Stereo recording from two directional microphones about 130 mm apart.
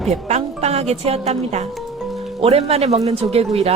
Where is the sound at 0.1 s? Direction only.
55° right (ahead or behind).